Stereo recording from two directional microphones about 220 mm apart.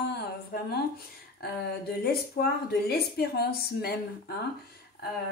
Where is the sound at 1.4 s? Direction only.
45° left (ahead or behind).